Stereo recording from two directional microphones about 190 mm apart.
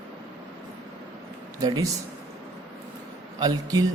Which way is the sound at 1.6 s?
20° right (ahead or behind).